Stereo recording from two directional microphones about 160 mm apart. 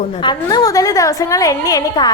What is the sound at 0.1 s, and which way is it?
A woman's voice, 30° left (ahead or behind).